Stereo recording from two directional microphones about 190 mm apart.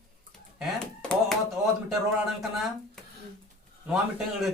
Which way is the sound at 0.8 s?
5° left (ahead or behind).